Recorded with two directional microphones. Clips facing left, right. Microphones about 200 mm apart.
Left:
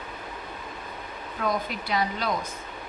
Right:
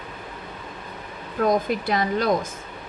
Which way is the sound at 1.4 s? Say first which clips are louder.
Right 7 dB; 50° right (ahead or behind).